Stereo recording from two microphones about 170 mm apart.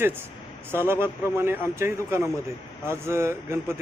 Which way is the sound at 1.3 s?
15° right (ahead or behind).